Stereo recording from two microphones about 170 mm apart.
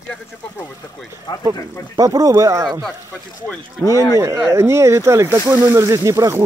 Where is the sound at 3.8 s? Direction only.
20° left (ahead or behind).